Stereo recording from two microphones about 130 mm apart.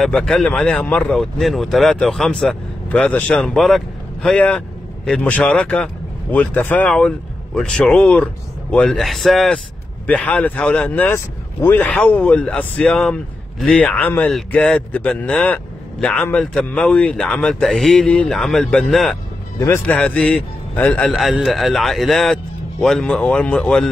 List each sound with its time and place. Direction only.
0.0 s a man's voice: 5° left (ahead or behind)
19.6 s speech: 20° left (ahead or behind)
20.0 s a man's voice: 10° left (ahead or behind)
21.1 s speech: centre (ahead or behind)